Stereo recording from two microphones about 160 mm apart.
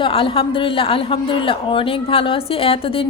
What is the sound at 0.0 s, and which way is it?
A man's voice, 35° left (ahead or behind).